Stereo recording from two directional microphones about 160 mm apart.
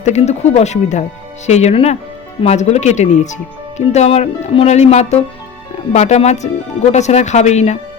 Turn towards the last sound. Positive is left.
turn(degrees=45)  # may be behind; listen again after turning